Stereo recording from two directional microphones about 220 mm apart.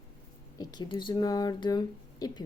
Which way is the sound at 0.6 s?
20° left (ahead or behind).